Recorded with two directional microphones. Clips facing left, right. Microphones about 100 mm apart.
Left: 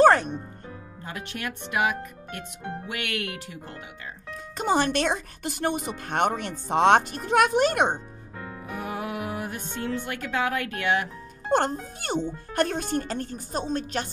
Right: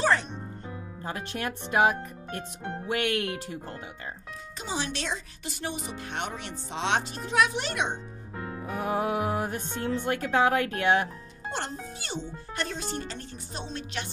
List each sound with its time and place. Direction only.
0.0 s music: 50° left (ahead or behind)
1.0 s speech: 35° right (ahead or behind)
4.6 s speech: 55° left (ahead or behind)
8.4 s speech: 30° right (ahead or behind)
11.5 s speech: 50° left (ahead or behind)